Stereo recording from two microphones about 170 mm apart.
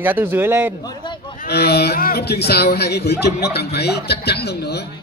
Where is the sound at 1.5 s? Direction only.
70° left (ahead or behind).